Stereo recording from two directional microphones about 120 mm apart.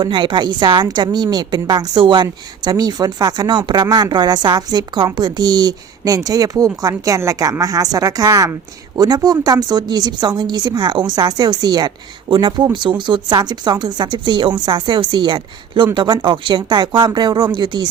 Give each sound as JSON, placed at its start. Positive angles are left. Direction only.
{"t": 0.0, "sound": "a woman's voice", "side_deg": -40}